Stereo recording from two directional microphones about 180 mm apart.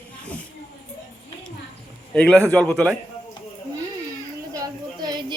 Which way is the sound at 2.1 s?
5° left (ahead or behind).